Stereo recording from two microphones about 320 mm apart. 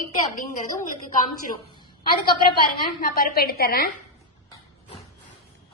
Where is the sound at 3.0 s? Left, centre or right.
Left.